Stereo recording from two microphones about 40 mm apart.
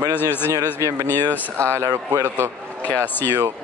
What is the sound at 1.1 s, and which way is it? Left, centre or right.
Speech, left.